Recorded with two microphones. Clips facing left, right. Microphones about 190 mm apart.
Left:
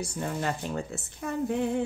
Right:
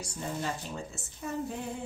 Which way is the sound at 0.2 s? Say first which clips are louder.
Left 3 dB; 65° left (ahead or behind).